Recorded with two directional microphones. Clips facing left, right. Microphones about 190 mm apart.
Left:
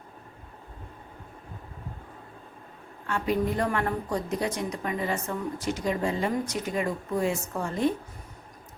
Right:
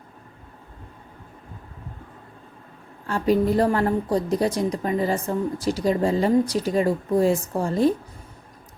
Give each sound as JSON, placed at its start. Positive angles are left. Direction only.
{"t": 3.1, "sound": "a woman's voice", "side_deg": -35}